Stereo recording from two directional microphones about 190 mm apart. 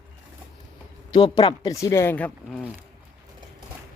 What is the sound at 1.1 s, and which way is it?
Speech, 25° left (ahead or behind).